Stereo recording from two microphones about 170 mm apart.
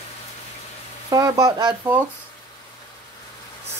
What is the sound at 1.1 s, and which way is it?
Speech, 20° right (ahead or behind).